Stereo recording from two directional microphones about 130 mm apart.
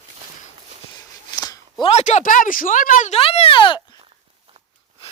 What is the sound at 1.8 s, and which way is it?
Speech, 60° left (ahead or behind).